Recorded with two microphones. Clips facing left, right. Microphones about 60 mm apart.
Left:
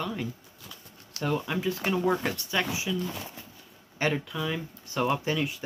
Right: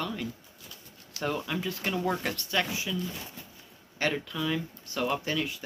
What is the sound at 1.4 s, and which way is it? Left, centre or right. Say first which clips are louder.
Speech: left 3 dB; centre.